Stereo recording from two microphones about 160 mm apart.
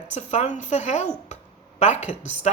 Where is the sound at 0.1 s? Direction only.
45° left (ahead or behind).